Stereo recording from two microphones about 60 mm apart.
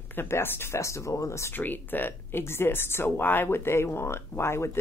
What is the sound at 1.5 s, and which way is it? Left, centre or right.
Speech, left.